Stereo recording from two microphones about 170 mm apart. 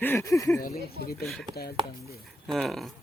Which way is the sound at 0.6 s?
60° left (ahead or behind).